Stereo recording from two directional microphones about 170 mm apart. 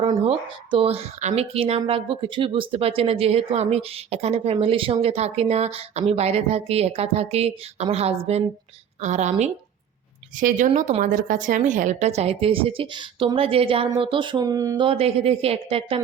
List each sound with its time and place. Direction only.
0.0 s a woman's voice: 30° right (ahead or behind)
10.3 s speech: 50° right (ahead or behind); by 14.8 s 20° right (ahead or behind)
14.8 s speech: 35° right (ahead or behind)